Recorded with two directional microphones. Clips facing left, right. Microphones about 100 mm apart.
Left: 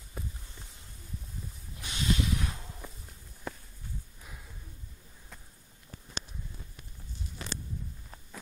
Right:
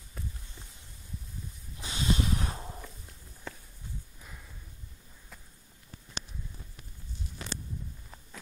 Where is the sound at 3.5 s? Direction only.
10° left (ahead or behind).